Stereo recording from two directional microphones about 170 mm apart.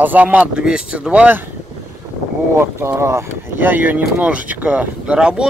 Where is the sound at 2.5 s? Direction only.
15° right (ahead or behind).